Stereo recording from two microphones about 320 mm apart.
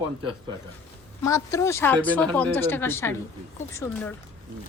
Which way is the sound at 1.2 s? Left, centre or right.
Centre.